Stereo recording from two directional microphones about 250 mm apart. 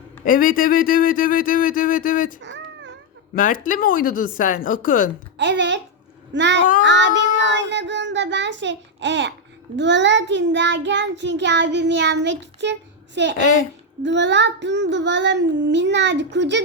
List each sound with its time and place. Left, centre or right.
0.3 s speech: left
2.4 s cat: right
3.3 s speech: left
5.4 s child singing: right